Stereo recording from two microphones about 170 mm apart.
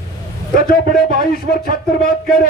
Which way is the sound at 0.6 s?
60° left (ahead or behind).